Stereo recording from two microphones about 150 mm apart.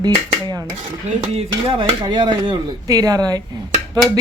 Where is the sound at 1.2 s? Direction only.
35° right (ahead or behind).